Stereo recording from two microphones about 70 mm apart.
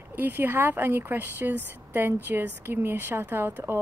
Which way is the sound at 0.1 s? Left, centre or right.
Right.